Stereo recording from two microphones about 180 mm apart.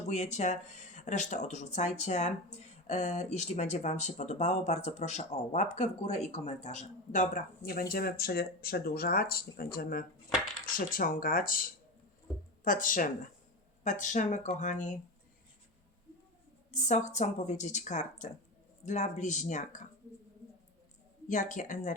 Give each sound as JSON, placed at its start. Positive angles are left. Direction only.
{"t": 0.1, "sound": "speech", "side_deg": 40}
{"t": 16.7, "sound": "speech", "side_deg": 40}
{"t": 21.5, "sound": "speech", "side_deg": 45}